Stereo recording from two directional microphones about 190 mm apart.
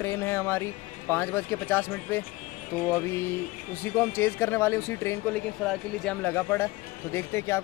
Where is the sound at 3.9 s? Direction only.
10° left (ahead or behind).